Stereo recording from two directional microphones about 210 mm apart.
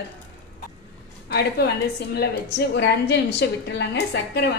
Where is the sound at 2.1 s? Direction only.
55° left (ahead or behind).